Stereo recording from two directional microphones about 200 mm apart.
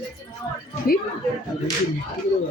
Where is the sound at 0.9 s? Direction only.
50° left (ahead or behind).